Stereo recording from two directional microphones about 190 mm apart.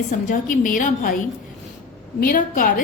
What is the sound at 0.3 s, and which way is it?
Speech, 45° left (ahead or behind).